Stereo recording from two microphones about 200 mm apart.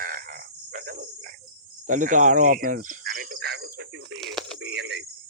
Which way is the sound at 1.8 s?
40° right (ahead or behind).